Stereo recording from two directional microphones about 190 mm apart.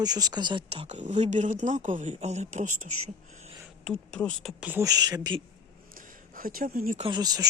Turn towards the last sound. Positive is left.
turn(degrees=-20)  # may be behind; listen again after turning